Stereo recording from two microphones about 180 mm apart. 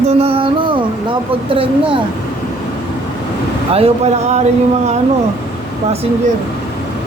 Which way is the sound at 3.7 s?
35° right (ahead or behind).